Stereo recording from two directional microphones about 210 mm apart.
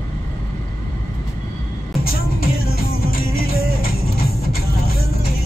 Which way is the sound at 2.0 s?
45° left (ahead or behind).